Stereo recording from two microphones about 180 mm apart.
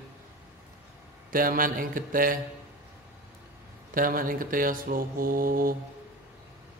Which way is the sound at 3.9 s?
50° right (ahead or behind).